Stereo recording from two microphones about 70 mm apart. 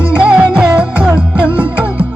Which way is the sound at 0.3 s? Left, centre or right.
Centre.